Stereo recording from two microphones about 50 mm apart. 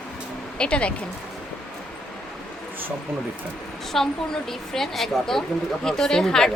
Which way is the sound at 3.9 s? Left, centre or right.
Centre.